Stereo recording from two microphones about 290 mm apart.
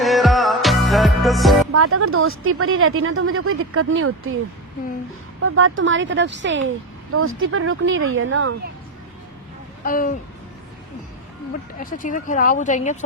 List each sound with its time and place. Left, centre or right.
0.0 s music: centre
1.7 s speech: right
5.4 s speech: right
9.8 s speech: left
11.8 s speech: left